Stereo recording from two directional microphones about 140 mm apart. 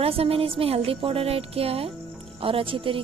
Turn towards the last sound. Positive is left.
turn(degrees=-40)  # may be behind; listen again after turning